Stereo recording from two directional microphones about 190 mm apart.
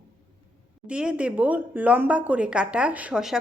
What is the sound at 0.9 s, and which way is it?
A woman's voice, 5° right (ahead or behind).